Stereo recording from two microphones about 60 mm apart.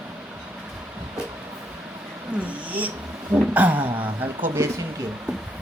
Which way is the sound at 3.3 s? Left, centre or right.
Right.